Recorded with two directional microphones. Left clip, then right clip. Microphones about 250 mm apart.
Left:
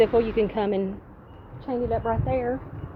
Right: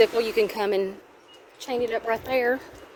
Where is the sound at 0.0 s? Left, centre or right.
Right.